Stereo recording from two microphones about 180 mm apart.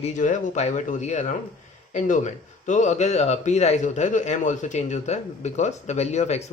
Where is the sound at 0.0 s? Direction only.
40° left (ahead or behind).